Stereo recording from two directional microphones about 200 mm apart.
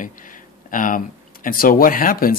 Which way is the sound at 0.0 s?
40° left (ahead or behind).